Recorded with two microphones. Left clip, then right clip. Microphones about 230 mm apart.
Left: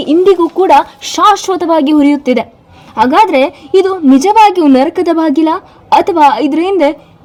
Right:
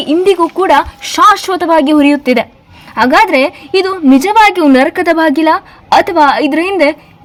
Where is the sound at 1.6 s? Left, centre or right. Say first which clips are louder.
Right 1 dB; right.